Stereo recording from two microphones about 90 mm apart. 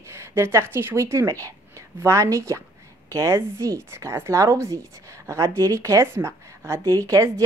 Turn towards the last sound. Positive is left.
turn(degrees=-35)  # may be behind; listen again after turning